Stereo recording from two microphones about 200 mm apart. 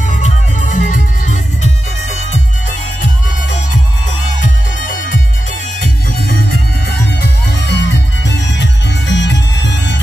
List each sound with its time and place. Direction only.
0.1 s music: 40° left (ahead or behind)
4.4 s music: 40° left (ahead or behind)
7.2 s music: 60° left (ahead or behind)